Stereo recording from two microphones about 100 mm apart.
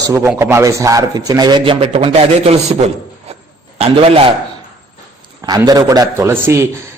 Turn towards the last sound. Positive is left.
turn(degrees=-25)  # may be behind; listen again after turning